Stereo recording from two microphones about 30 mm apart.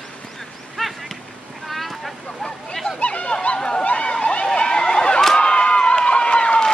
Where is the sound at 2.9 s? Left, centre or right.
Left.